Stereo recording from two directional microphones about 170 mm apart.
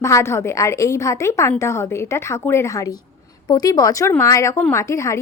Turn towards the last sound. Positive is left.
turn(degrees=15)  # may be behind; listen again after turning